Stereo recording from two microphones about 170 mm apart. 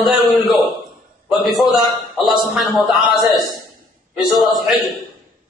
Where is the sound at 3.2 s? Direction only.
20° left (ahead or behind).